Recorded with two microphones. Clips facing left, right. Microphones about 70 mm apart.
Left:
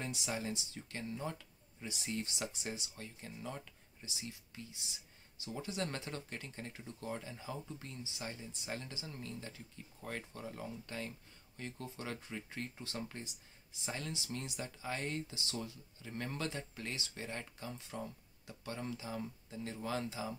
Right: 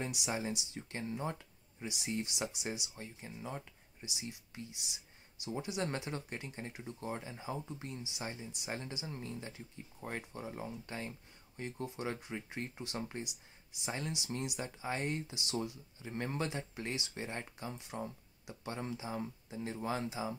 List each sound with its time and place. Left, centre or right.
0.0 s speech: centre
1.9 s speech: centre
5.4 s speech: centre